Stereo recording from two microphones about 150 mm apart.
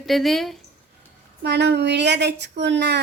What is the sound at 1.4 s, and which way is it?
Speech, 90° right.